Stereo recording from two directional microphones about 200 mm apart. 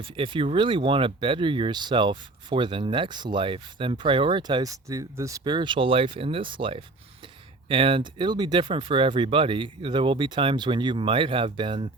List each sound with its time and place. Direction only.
0.0 s speech: 25° right (ahead or behind)